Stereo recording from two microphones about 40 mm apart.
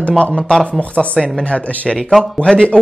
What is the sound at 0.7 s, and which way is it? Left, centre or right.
Speech, left.